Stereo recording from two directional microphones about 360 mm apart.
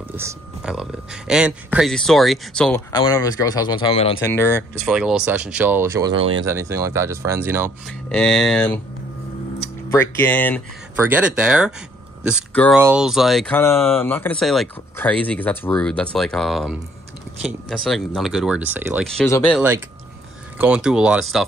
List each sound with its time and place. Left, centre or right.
0.1 s speech: centre
6.1 s speech: right
6.4 s speech: centre